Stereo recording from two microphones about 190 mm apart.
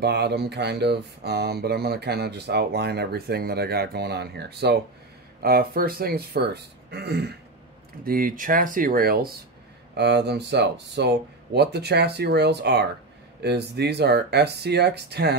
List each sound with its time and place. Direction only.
0.0 s speech: 60° right (ahead or behind)
9.9 s speech: 60° right (ahead or behind)